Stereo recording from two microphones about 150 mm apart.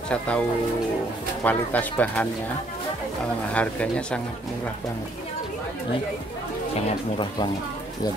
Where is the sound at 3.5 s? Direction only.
10° left (ahead or behind).